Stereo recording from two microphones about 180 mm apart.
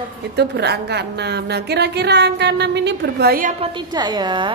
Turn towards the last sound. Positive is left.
turn(degrees=-25)  # may be behind; listen again after turning